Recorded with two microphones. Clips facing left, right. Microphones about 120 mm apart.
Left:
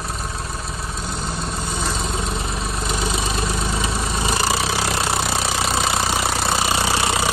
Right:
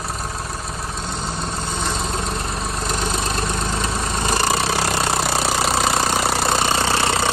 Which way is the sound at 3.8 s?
5° left (ahead or behind).